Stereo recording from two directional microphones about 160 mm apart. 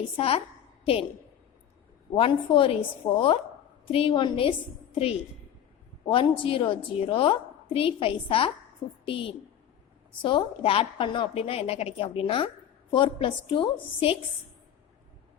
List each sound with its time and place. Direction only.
0.2 s a woman's voice: 40° left (ahead or behind)
2.1 s a woman's voice: 35° left (ahead or behind)
3.0 s a woman's voice: 15° left (ahead or behind)
3.8 s a woman's voice: 35° left (ahead or behind)